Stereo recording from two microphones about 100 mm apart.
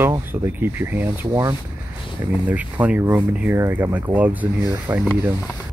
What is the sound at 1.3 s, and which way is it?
Speech, 35° right (ahead or behind).